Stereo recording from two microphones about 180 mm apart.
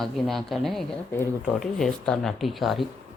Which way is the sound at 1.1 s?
10° left (ahead or behind).